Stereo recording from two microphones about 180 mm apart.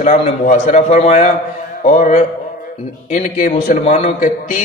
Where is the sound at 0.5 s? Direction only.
40° left (ahead or behind).